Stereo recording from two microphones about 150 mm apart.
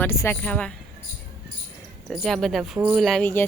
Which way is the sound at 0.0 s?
15° left (ahead or behind).